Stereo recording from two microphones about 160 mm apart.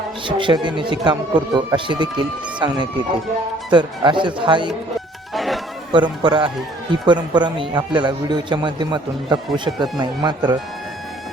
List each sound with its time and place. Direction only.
0.3 s a man's voice: 30° right (ahead or behind)
5.3 s a sound: centre (ahead or behind)
5.9 s a man's voice: 30° right (ahead or behind)